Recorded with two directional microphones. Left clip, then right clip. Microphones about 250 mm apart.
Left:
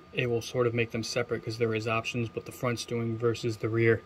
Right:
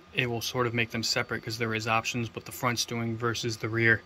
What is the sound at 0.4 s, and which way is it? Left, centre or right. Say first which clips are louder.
Speech: even; centre.